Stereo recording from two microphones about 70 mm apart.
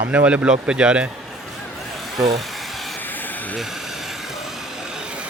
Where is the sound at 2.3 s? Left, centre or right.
Centre.